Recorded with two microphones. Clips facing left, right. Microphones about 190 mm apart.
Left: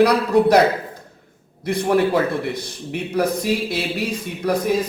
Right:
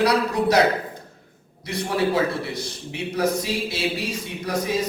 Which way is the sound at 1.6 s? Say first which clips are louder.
Left 6 dB; 55° left (ahead or behind).